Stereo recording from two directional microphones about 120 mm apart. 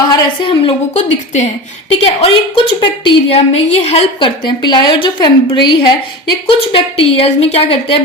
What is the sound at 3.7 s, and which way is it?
Speech, 60° left (ahead or behind).